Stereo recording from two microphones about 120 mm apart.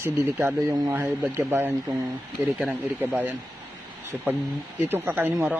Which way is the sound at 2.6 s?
10° right (ahead or behind).